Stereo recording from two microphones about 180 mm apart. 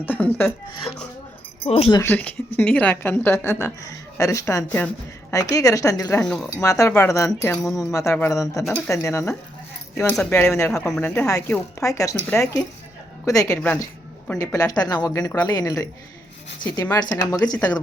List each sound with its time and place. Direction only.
0.0 s a woman's voice: 10° left (ahead or behind)
1.6 s speech: 35° left (ahead or behind)
1.9 s a woman's voice: 15° left (ahead or behind)
6.1 s speech: 5° left (ahead or behind)
6.6 s a woman's voice: 15° left (ahead or behind)
13.2 s speech: 20° left (ahead or behind)
13.5 s speech: 5° left (ahead or behind)
14.3 s speech: 20° left (ahead or behind)